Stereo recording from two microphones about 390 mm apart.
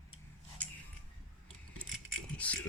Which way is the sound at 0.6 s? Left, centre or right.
Centre.